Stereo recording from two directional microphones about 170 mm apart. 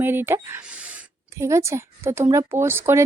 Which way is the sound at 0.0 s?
10° right (ahead or behind).